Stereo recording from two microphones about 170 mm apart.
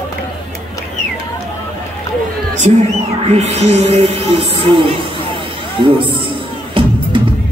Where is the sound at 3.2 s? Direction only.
40° right (ahead or behind).